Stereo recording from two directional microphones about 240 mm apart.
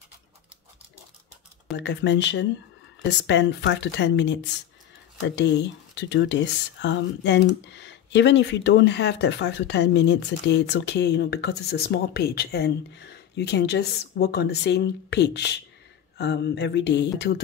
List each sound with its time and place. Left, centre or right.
1.8 s speech: left
5.9 s speech: left